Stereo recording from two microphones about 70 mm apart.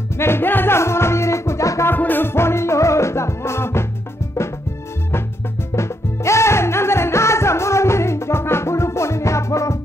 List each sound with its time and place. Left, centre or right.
0.2 s music: left
1.9 s music: left
5.8 s music: left